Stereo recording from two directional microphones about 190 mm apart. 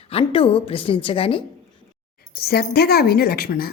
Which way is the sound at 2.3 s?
55° left (ahead or behind).